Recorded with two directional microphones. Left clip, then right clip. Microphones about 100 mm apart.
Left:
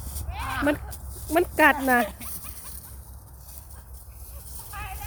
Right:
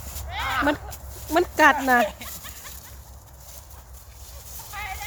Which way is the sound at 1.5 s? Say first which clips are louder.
Right 2 dB; 5° left (ahead or behind).